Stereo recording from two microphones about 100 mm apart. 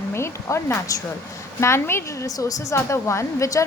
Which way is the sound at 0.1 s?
25° left (ahead or behind).